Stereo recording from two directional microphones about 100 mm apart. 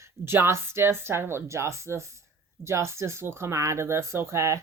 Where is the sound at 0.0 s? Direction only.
25° right (ahead or behind).